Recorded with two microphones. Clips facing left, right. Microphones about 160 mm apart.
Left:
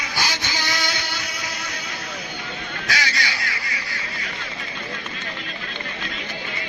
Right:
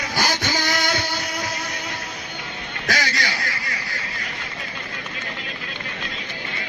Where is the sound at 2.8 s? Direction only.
45° right (ahead or behind).